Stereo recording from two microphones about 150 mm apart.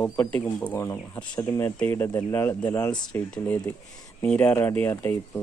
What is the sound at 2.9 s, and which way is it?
Speech, 5° left (ahead or behind).